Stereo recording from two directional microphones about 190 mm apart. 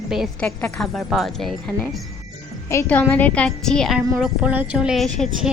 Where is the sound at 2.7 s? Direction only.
10° left (ahead or behind).